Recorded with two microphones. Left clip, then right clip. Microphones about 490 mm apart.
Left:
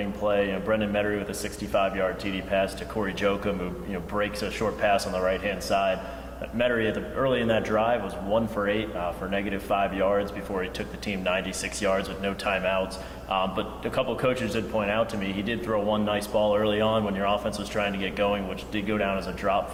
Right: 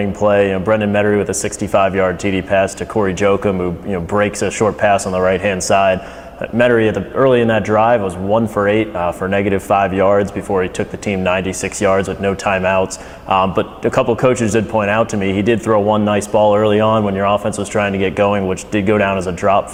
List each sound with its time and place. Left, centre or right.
0.0 s speech: right